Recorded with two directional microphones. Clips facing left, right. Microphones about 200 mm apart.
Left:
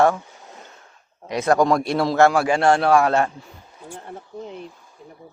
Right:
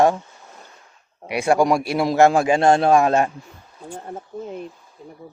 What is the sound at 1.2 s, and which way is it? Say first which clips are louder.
Speech: even; 10° right (ahead or behind).